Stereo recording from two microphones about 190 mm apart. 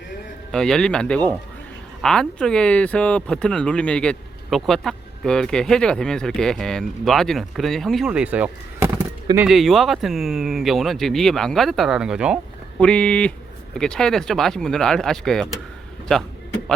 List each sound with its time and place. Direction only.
0.5 s speech: 5° left (ahead or behind)